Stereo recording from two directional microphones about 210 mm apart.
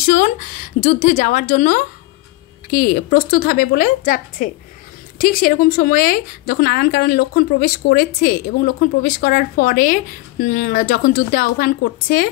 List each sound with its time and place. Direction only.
0.0 s a woman's voice: 40° left (ahead or behind)